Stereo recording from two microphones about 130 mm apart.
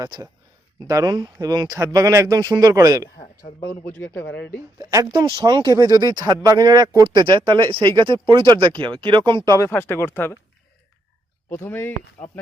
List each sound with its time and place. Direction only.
0.0 s speech: 25° right (ahead or behind)
3.6 s speech: 20° left (ahead or behind)
4.8 s speech: 30° right (ahead or behind)
9.6 s speech: 15° left (ahead or behind)
11.4 s speech: 15° left (ahead or behind)